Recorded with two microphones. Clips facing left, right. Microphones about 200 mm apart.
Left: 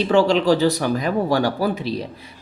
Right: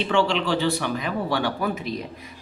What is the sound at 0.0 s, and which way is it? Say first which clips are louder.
Speech: left 6 dB; 40° left (ahead or behind).